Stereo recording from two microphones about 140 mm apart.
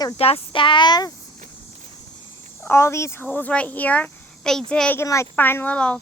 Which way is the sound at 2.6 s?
20° left (ahead or behind).